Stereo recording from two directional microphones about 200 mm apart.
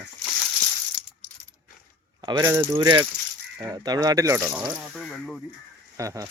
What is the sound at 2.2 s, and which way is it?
Speech, 20° right (ahead or behind).